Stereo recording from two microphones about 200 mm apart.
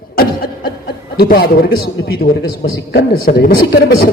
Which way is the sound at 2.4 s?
50° left (ahead or behind).